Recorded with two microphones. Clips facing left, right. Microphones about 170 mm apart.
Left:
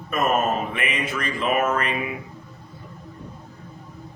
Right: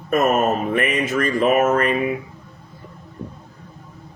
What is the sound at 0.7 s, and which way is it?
Speech, 45° right (ahead or behind).